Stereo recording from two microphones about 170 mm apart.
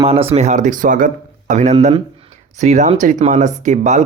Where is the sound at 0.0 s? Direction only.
35° right (ahead or behind).